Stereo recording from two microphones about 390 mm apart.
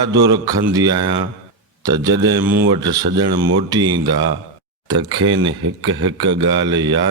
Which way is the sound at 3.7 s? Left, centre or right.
Centre.